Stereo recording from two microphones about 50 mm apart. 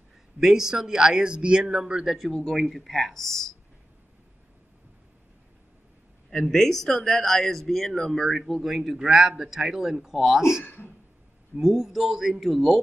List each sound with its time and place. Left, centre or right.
0.4 s speech: centre
2.1 s speech: centre
6.5 s speech: centre
8.9 s speech: centre
10.6 s speech: left
11.6 s speech: centre